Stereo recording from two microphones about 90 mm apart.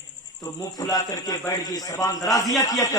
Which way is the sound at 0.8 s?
40° left (ahead or behind).